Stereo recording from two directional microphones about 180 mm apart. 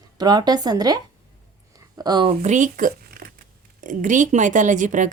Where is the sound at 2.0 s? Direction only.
25° right (ahead or behind).